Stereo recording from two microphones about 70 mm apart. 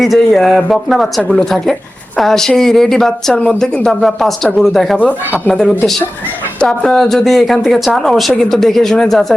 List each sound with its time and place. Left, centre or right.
0.0 s speech: centre
4.9 s speech: left
5.5 s speech: centre